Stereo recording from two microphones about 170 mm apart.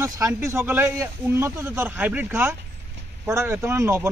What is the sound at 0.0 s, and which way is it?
Speech, 15° right (ahead or behind).